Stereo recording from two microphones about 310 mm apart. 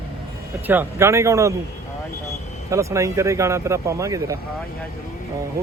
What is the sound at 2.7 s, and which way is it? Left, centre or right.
Speech, centre.